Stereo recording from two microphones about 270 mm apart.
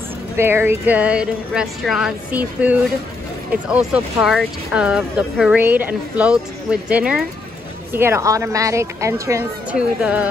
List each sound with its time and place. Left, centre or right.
0.4 s speech: centre